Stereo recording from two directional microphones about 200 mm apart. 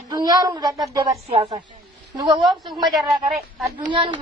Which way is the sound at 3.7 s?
25° right (ahead or behind).